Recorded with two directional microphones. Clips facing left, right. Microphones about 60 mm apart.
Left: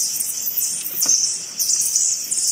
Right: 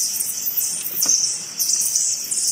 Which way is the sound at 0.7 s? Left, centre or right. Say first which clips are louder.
Even; right.